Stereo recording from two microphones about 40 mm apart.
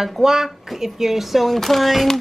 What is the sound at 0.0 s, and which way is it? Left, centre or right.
Speech, centre.